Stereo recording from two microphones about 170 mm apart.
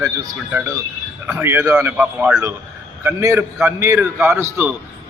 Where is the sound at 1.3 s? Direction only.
10° right (ahead or behind).